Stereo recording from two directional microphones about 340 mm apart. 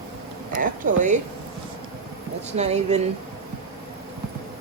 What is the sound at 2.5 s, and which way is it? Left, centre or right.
Speech, centre.